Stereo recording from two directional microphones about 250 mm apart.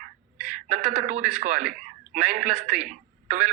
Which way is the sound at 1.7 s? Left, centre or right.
Right.